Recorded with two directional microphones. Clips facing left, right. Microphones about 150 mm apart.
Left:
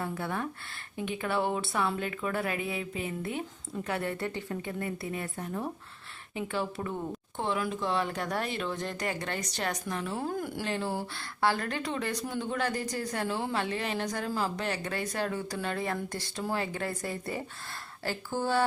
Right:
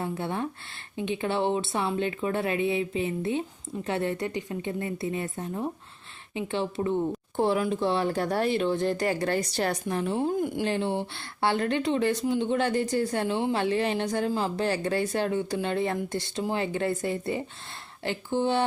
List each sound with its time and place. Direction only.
0.0 s speech: 25° right (ahead or behind)
7.3 s speech: 35° right (ahead or behind); by 18.6 s 20° right (ahead or behind)